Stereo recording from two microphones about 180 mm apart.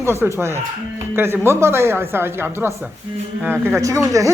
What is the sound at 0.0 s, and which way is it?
Speech, 15° right (ahead or behind).